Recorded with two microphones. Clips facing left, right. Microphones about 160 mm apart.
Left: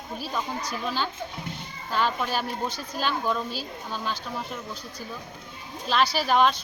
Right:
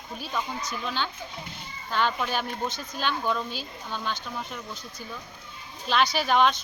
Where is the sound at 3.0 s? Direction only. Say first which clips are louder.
Left 1 dB; 5° left (ahead or behind).